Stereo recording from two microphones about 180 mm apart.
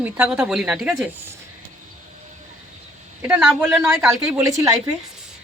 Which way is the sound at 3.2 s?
10° right (ahead or behind).